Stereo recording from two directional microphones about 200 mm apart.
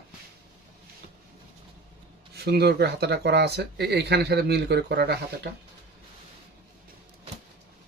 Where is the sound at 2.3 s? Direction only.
55° right (ahead or behind).